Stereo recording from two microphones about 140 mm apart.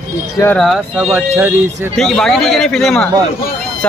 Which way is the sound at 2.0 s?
5° left (ahead or behind).